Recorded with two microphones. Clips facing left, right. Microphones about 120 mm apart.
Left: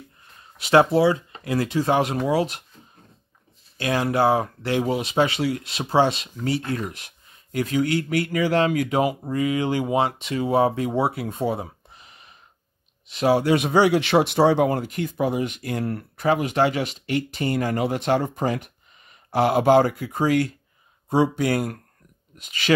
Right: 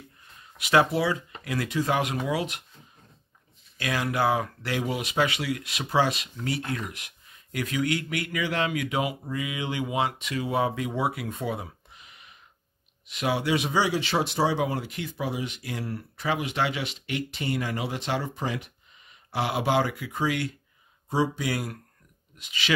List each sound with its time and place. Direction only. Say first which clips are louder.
0.6 s speech: left 6 dB; 30° left (ahead or behind)
3.7 s speech: left 6 dB; 30° left (ahead or behind)
21.1 s speech: left 6 dB; 55° left (ahead or behind)